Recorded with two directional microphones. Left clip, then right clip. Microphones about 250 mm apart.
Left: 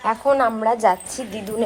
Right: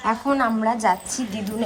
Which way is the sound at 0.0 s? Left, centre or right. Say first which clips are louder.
Left 3 dB; centre.